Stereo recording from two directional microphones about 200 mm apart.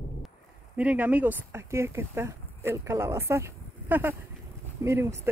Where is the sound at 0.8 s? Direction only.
5° right (ahead or behind).